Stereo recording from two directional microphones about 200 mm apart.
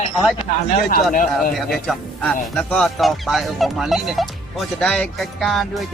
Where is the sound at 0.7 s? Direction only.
45° left (ahead or behind).